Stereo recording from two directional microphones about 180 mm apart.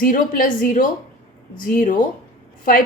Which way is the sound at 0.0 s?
50° left (ahead or behind).